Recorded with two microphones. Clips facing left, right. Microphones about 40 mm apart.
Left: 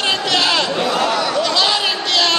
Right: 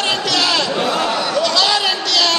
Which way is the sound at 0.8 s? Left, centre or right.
Right.